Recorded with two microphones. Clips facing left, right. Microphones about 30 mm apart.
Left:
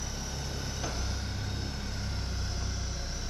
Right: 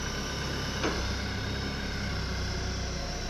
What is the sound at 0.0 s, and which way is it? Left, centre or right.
Vehicle, right.